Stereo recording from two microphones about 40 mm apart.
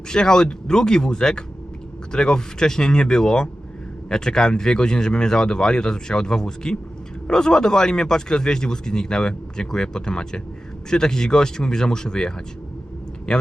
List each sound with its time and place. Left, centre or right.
0.1 s speech: centre